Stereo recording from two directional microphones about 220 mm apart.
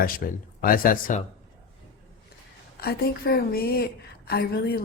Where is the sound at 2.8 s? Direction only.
45° left (ahead or behind).